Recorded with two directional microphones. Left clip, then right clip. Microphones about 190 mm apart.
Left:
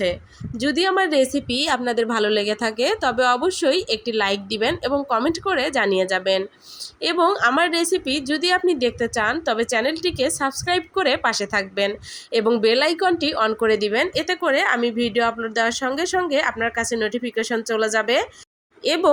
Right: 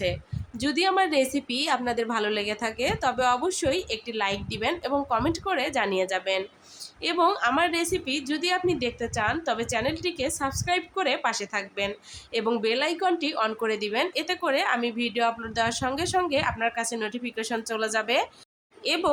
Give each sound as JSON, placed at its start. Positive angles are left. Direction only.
{"t": 0.6, "sound": "a woman's voice", "side_deg": 20}